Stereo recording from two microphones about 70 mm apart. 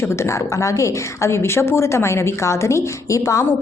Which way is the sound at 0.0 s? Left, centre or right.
Left.